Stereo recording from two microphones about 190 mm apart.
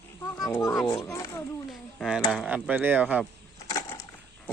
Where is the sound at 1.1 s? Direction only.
15° left (ahead or behind).